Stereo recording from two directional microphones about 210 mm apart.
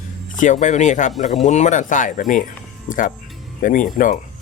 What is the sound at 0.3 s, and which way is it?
Speech, 35° left (ahead or behind).